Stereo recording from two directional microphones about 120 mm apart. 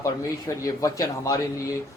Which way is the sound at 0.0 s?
25° left (ahead or behind).